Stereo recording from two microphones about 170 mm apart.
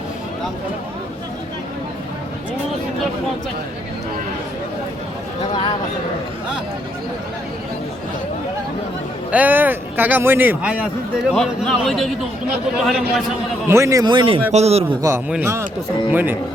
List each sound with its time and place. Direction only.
9.3 s a man's voice: 10° right (ahead or behind)
13.7 s speech: 15° right (ahead or behind); by 14.8 s 40° right (ahead or behind)
15.3 s a man's voice: 15° right (ahead or behind)